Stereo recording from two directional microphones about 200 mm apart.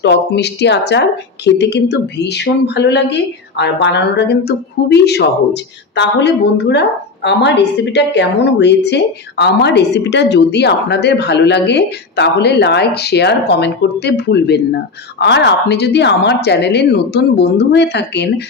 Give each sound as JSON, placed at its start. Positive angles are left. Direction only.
{"t": 0.0, "sound": "a woman's voice", "side_deg": 55}